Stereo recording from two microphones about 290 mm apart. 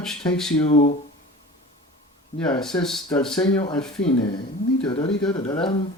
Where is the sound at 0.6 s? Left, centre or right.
Left.